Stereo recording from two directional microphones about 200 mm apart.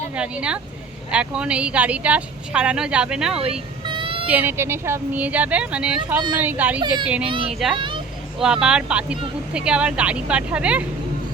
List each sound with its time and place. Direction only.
0.1 s speech: 5° right (ahead or behind)
3.8 s child singing: 25° right (ahead or behind)
4.3 s speech: 10° right (ahead or behind)
7.8 s vehicle: 25° right (ahead or behind)
8.6 s speech: 5° right (ahead or behind)